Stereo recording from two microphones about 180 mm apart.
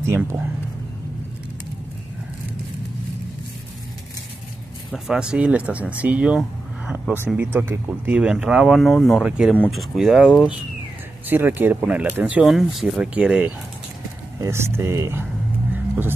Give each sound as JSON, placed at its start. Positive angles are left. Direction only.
{"t": 0.0, "sound": "speech", "side_deg": -15}
{"t": 4.9, "sound": "speech", "side_deg": -5}